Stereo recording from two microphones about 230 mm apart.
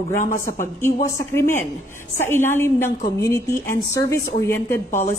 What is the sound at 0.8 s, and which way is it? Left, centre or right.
A woman's voice, centre.